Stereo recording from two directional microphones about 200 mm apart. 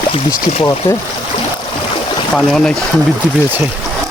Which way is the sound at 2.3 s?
Centre (ahead or behind).